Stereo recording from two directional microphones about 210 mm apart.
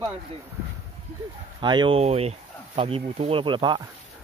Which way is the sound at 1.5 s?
20° right (ahead or behind).